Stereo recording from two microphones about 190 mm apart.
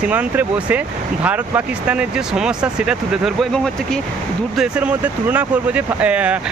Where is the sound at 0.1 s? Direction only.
10° right (ahead or behind).